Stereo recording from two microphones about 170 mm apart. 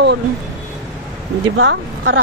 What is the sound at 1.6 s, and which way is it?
Speech, 90° right.